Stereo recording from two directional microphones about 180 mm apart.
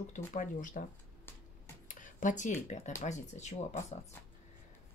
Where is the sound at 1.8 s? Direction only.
45° left (ahead or behind).